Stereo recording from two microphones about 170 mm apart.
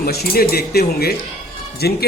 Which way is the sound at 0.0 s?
65° left (ahead or behind).